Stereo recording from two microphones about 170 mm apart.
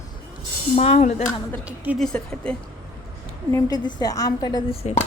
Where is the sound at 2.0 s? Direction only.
5° left (ahead or behind).